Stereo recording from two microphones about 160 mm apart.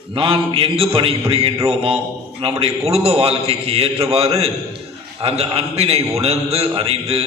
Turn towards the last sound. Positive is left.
turn(degrees=-40)  # may be behind; listen again after turning